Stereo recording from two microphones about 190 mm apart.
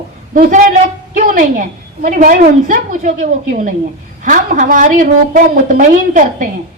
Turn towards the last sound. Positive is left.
turn(degrees=-40)  # may be behind; listen again after turning